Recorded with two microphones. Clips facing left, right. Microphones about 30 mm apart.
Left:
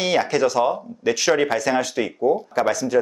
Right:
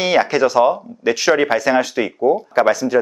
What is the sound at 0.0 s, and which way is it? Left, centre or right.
Speech, right.